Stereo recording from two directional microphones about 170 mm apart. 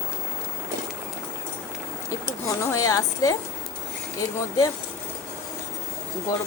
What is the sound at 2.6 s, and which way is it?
Speech, 20° left (ahead or behind).